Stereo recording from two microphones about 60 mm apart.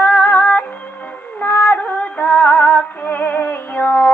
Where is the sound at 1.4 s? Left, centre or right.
Left.